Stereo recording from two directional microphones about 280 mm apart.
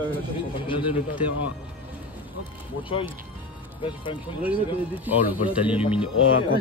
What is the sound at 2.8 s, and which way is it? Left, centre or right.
Speech, centre.